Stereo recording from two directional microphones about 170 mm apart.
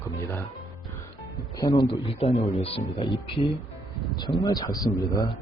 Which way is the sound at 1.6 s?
25° left (ahead or behind).